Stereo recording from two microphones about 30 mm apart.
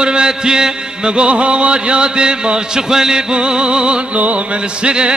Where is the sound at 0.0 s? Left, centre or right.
Right.